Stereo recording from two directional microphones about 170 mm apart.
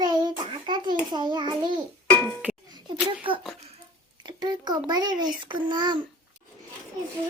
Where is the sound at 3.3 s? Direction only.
30° right (ahead or behind).